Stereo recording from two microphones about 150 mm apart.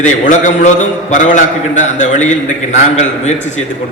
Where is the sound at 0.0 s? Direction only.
55° left (ahead or behind).